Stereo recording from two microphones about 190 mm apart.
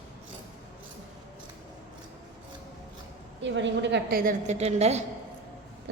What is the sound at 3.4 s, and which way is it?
Speech, 75° right (ahead or behind).